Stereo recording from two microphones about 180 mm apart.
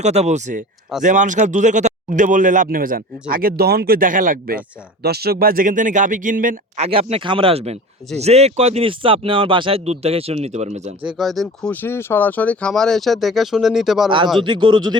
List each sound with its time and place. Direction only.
0.0 s a man's voice: 40° right (ahead or behind)
11.0 s speech: centre (ahead or behind)
14.4 s a man's voice: 25° right (ahead or behind)